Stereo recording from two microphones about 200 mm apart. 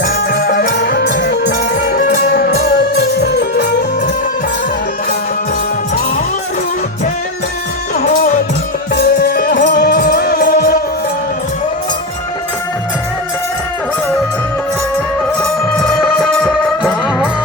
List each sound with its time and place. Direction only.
0.3 s music: 50° left (ahead or behind)
7.9 s music: 35° left (ahead or behind)
9.0 s music: 50° left (ahead or behind)
15.4 s music: 5° left (ahead or behind)